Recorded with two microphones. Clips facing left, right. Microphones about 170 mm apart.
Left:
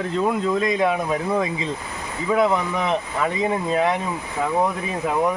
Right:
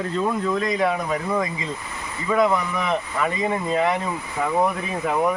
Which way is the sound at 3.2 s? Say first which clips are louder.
Left 2 dB; 15° left (ahead or behind).